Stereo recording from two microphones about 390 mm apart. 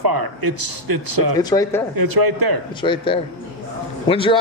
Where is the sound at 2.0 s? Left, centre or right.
Right.